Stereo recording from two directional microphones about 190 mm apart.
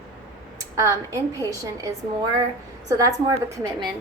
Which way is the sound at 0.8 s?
15° right (ahead or behind).